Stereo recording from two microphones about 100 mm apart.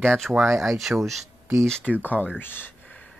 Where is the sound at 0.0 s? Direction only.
5° left (ahead or behind).